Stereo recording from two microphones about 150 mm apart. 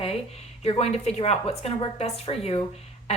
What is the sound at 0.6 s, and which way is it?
A woman's voice, 45° left (ahead or behind).